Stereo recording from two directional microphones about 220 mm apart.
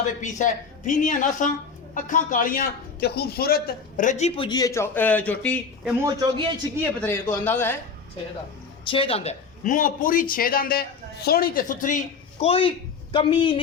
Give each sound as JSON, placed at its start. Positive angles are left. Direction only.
{"t": 0.0, "sound": "a man's voice", "side_deg": 35}
{"t": 6.1, "sound": "a man's voice", "side_deg": -20}
{"t": 7.0, "sound": "speech", "side_deg": 10}
{"t": 8.9, "sound": "a man's voice", "side_deg": 25}